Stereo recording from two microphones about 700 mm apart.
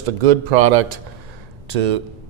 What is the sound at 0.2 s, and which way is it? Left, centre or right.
Speech, right.